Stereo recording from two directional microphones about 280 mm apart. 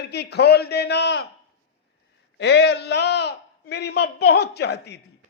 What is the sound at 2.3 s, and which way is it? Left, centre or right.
A man's voice, left.